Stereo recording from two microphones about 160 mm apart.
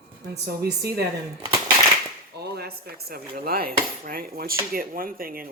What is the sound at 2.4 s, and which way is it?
Speech, 80° right.